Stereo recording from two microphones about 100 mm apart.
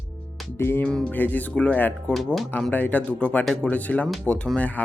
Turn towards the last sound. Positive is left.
turn(degrees=10)  # may be behind; listen again after turning